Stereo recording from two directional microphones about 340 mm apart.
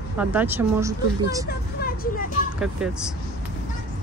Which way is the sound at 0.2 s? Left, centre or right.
Centre.